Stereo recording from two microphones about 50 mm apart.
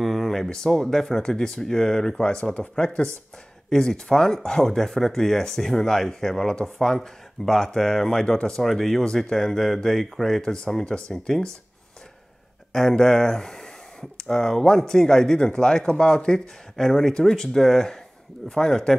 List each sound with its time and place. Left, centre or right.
0.0 s a sound: centre
0.7 s speech: centre
12.7 s speech: centre